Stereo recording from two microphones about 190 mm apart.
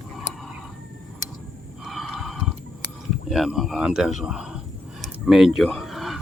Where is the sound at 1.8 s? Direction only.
5° right (ahead or behind).